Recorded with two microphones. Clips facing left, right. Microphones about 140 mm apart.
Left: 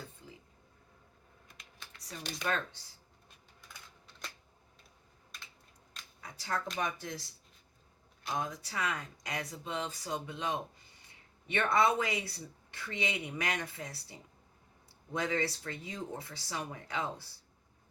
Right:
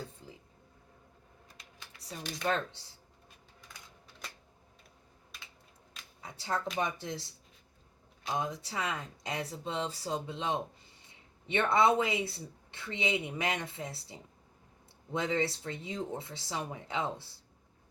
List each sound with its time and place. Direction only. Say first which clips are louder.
1.5 s typing: even; 30° right (ahead or behind)
6.2 s a sound: right 2 dB; 25° right (ahead or behind)
6.7 s speech: right 2 dB; 25° right (ahead or behind)
8.4 s speech: right 1 dB; 25° right (ahead or behind)